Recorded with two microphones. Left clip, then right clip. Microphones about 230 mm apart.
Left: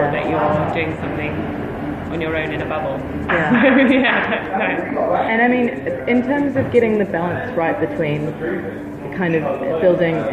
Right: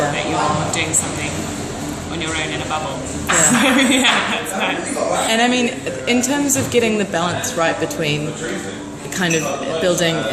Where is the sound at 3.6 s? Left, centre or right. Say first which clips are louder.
Left 1 dB; right.